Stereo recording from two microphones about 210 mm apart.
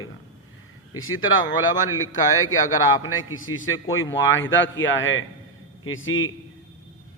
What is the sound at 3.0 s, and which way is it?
A man's voice, 75° left (ahead or behind).